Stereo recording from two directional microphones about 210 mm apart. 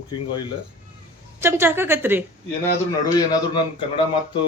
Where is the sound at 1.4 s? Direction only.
10° right (ahead or behind).